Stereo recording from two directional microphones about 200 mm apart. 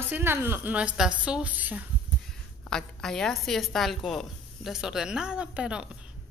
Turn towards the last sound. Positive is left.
turn(degrees=-5)  # may be behind; listen again after turning